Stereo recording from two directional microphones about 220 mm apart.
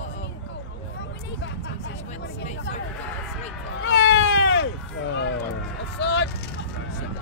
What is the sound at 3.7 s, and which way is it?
Speech, 55° left (ahead or behind).